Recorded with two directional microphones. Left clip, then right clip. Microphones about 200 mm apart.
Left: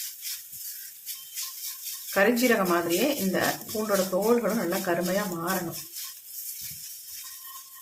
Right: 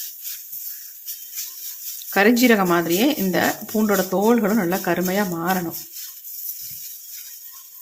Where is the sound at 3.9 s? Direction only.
55° right (ahead or behind).